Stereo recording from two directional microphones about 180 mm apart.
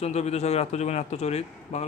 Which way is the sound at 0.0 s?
35° left (ahead or behind).